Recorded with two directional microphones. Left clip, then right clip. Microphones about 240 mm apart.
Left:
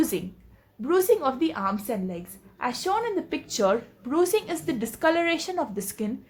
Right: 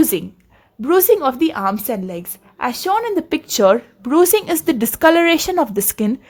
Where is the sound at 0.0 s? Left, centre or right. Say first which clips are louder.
Right 9 dB; right.